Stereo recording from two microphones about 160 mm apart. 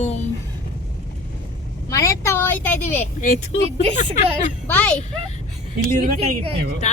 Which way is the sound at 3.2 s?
55° left (ahead or behind).